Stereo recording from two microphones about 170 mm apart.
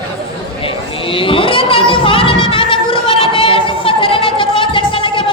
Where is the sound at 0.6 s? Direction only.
30° left (ahead or behind).